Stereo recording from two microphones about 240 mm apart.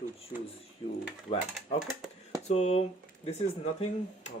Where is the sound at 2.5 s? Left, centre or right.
Left.